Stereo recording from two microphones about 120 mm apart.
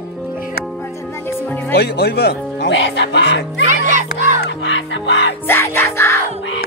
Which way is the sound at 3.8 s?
90° right.